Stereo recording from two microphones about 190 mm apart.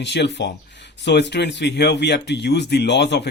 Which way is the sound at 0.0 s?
65° left (ahead or behind).